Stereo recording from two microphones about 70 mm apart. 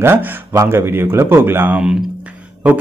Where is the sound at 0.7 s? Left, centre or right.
Right.